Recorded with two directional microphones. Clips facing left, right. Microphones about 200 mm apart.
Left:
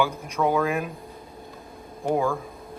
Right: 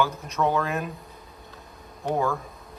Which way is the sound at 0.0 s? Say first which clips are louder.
Left 1 dB; 10° left (ahead or behind).